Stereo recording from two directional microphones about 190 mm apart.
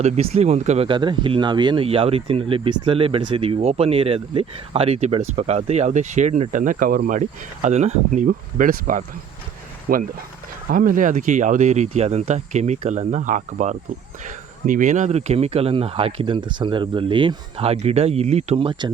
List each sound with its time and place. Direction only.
0.0 s speech: 35° right (ahead or behind)